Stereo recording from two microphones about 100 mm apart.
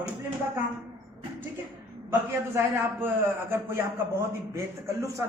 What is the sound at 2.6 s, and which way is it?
A man's voice, 25° right (ahead or behind).